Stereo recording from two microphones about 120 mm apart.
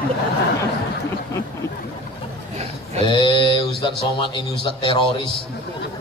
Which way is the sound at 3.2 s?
40° left (ahead or behind).